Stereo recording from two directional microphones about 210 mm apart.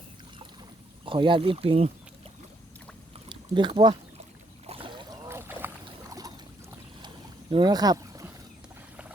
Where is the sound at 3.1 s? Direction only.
20° right (ahead or behind).